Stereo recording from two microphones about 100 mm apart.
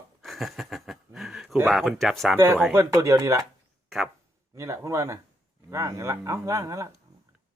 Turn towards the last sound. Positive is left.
turn(degrees=-30)  # may be behind; listen again after turning